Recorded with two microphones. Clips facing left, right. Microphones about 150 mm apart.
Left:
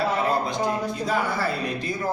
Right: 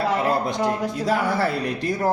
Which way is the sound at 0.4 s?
70° right (ahead or behind).